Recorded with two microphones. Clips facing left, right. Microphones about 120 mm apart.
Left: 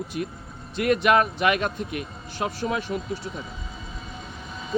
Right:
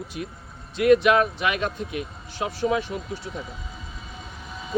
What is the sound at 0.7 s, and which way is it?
Speech, 50° left (ahead or behind).